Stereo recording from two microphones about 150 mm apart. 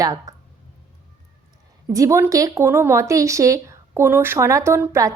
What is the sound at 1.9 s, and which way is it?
Speech, 20° right (ahead or behind).